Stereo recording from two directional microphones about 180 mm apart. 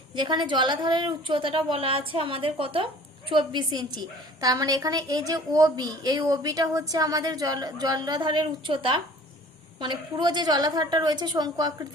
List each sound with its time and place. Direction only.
0.2 s a woman's voice: 25° right (ahead or behind)